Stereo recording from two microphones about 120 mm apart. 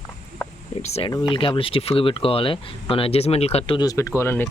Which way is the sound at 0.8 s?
60° left (ahead or behind).